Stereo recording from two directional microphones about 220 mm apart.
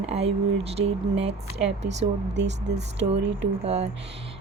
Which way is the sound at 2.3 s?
50° right (ahead or behind).